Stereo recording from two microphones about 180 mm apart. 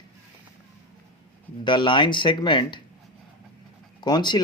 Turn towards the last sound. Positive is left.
turn(degrees=25)  # may be behind; listen again after turning